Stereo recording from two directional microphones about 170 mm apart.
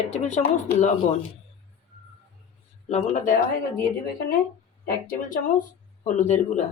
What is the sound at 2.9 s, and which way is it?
Speech, 40° left (ahead or behind).